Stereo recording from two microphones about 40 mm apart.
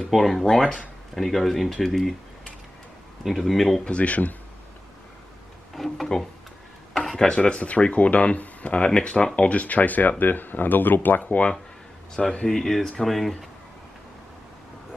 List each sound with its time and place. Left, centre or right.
0.1 s speech: centre
3.3 s speech: centre
3.8 s speech: left
5.8 s speech: centre
7.2 s speech: left
7.6 s speech: left
12.2 s speech: left
12.4 s speech: centre